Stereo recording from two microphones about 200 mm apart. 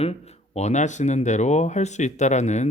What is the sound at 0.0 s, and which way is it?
Speech, 30° left (ahead or behind).